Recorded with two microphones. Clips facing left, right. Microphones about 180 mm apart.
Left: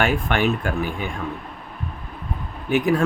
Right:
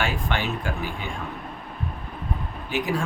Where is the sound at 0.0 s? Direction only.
55° left (ahead or behind).